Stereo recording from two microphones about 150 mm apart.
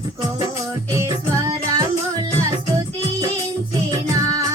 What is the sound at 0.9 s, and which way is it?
Music, 20° right (ahead or behind).